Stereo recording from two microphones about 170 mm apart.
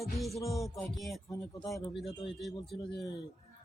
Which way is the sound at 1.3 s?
20° left (ahead or behind).